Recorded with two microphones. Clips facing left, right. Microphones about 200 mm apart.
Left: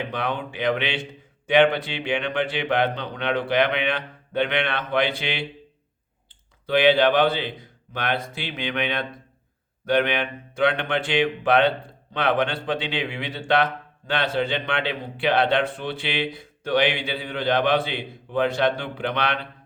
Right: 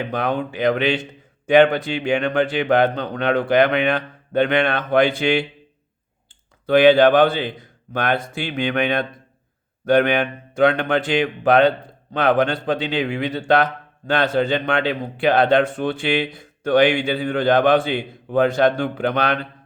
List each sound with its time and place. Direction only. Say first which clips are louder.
0.0 s a man's voice: right 5 dB; 45° right (ahead or behind)
6.7 s a man's voice: right 6 dB; 45° right (ahead or behind)